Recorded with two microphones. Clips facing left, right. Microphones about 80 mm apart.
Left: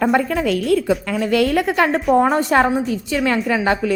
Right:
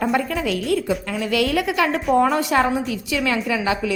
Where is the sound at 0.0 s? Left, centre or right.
Left.